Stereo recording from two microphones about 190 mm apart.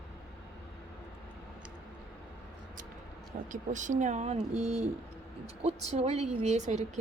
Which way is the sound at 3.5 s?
40° right (ahead or behind).